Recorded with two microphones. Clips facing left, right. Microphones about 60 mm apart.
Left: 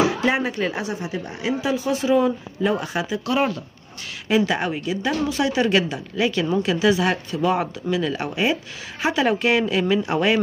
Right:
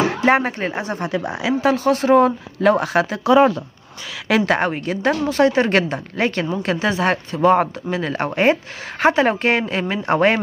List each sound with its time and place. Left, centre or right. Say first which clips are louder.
0.0 s speech: right 3 dB; right
0.9 s speech: right 6 dB; right
1.6 s speech: right 7 dB; right
4.5 s speech: right 4 dB; right